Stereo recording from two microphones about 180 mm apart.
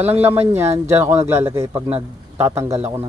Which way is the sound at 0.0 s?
10° right (ahead or behind).